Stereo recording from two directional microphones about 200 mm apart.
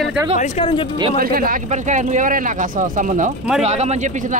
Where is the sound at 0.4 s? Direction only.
25° left (ahead or behind).